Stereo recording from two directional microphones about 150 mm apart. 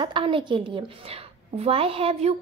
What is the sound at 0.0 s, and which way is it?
A woman's voice, 35° right (ahead or behind).